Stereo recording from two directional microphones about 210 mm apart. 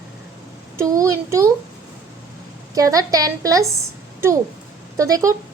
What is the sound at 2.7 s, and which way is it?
Speech, 15° right (ahead or behind).